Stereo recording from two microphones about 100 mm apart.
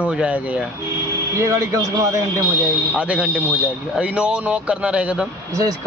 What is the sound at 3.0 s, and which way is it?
A man's voice, 15° right (ahead or behind).